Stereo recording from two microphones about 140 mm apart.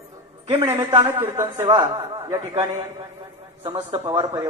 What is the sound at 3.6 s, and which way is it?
Speech, 45° right (ahead or behind).